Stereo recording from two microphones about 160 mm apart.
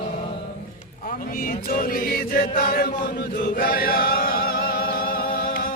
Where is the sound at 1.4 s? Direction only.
60° left (ahead or behind).